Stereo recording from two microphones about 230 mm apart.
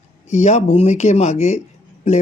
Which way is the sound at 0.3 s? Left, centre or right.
Left.